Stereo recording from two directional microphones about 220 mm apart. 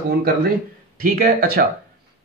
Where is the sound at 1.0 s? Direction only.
40° right (ahead or behind).